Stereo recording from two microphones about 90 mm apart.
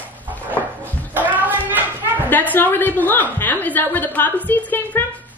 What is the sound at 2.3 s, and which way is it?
A woman's voice, 20° left (ahead or behind).